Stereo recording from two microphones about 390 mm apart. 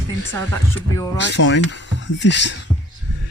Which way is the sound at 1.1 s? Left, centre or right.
Left.